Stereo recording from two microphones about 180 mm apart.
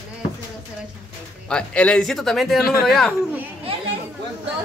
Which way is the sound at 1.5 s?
5° left (ahead or behind).